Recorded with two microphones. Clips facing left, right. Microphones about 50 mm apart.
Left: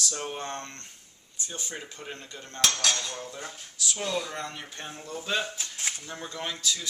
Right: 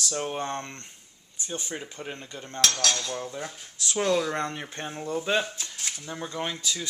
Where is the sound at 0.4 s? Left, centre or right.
Right.